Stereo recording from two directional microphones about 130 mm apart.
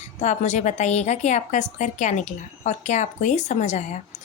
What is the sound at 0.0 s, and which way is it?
A woman's voice, 60° left (ahead or behind).